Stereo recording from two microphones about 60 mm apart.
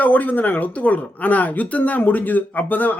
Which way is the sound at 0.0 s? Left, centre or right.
Left.